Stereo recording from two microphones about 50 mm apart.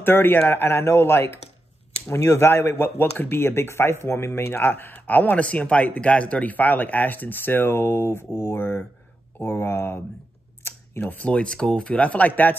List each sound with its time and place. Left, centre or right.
0.0 s speech: left
2.0 s speech: left
2.7 s speech: left
4.9 s speech: left
10.6 s a sound: left
11.0 s speech: left
11.2 s speech: left